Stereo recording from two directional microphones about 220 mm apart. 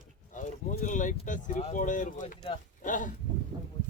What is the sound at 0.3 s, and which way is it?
Speech, 35° left (ahead or behind).